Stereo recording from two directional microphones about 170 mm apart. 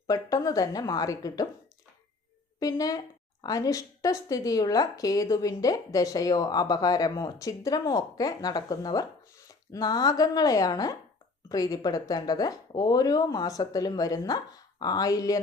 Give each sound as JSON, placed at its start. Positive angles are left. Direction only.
{"t": 0.1, "sound": "a woman's voice", "side_deg": 20}
{"t": 2.6, "sound": "a woman's voice", "side_deg": 20}